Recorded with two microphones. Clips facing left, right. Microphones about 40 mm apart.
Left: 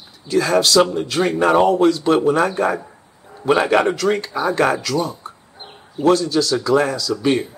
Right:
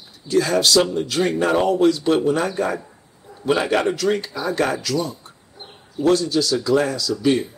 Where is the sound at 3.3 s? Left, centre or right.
Left.